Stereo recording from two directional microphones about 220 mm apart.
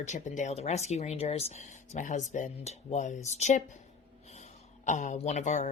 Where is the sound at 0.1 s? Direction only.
35° left (ahead or behind).